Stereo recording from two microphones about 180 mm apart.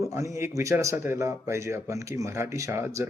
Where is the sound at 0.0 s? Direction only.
15° right (ahead or behind).